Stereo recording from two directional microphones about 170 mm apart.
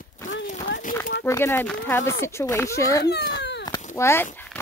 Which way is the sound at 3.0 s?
75° left (ahead or behind).